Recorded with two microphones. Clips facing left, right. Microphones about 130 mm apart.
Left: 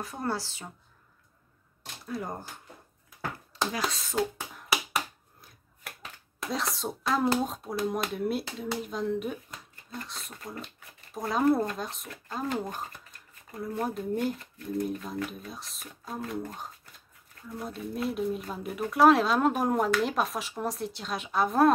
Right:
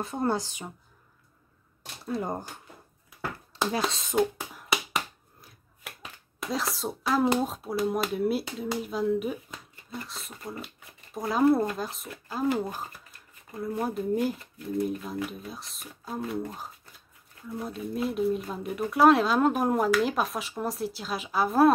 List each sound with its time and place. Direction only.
0.0 s speech: 25° right (ahead or behind)
2.0 s speech: 25° right (ahead or behind)
3.5 s a sound: 30° right (ahead or behind)
3.9 s speech: 20° right (ahead or behind)
4.6 s finger snapping: centre (ahead or behind)
6.4 s speech: centre (ahead or behind)